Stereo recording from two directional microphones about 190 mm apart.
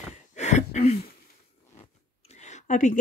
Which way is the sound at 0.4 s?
35° left (ahead or behind).